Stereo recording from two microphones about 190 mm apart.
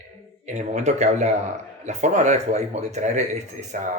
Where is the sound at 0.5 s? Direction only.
35° right (ahead or behind).